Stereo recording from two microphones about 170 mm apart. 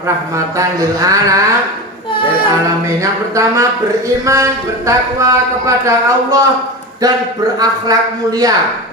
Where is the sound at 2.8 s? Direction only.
20° right (ahead or behind).